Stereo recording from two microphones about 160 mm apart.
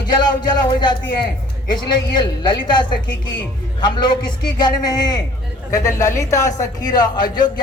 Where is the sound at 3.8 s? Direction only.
30° left (ahead or behind).